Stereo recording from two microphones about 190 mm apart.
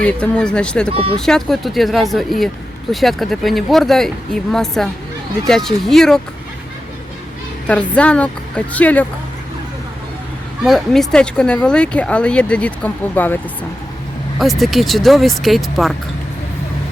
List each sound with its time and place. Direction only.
0.0 s speech: 5° left (ahead or behind)
0.9 s speech: 30° right (ahead or behind)
1.1 s speech: centre (ahead or behind)
7.7 s a woman's voice: 5° left (ahead or behind)
10.6 s speech: centre (ahead or behind)